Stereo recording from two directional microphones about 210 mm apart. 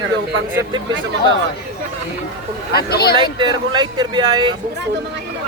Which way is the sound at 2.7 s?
50° left (ahead or behind).